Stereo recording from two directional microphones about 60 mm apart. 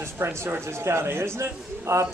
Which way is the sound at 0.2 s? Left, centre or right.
Right.